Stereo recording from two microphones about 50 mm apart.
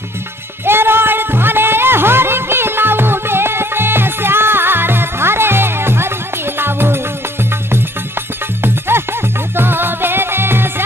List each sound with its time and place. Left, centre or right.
0.7 s music: right
8.6 s music: right